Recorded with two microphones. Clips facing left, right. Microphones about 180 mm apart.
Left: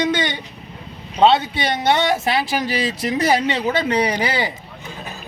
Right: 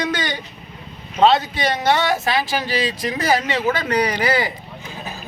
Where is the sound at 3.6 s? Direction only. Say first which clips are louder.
Left 1 dB; 25° left (ahead or behind).